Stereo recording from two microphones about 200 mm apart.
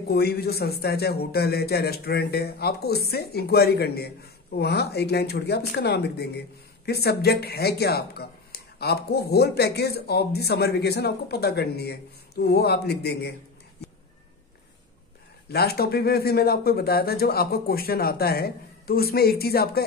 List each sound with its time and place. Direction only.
0.1 s speech: 50° left (ahead or behind)
15.4 s speech: 50° left (ahead or behind)